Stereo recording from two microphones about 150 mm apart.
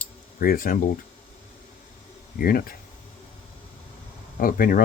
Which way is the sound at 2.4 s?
75° left (ahead or behind).